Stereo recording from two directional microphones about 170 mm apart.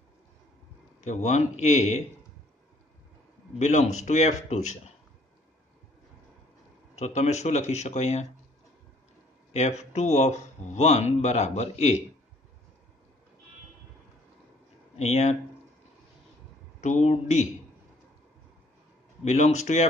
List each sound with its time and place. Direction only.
1.0 s speech: 45° left (ahead or behind)
3.5 s speech: 40° left (ahead or behind)
7.0 s speech: 40° left (ahead or behind)
9.5 s speech: 40° left (ahead or behind)
15.0 s speech: 40° left (ahead or behind)
16.8 s speech: 40° left (ahead or behind)
19.2 s speech: 40° left (ahead or behind)